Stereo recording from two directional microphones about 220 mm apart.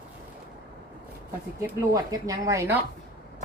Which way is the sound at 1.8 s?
15° right (ahead or behind).